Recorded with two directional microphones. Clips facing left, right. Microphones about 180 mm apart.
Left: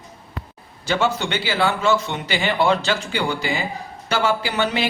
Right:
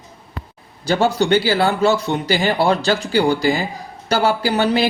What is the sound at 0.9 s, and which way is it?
Speech, 35° right (ahead or behind).